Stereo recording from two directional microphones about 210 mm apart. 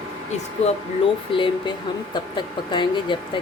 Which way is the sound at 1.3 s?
25° left (ahead or behind).